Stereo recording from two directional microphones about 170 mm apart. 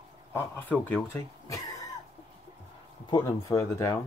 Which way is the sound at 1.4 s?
20° left (ahead or behind).